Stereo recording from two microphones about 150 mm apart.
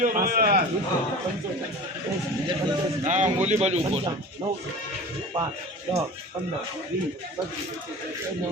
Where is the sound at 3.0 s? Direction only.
55° right (ahead or behind).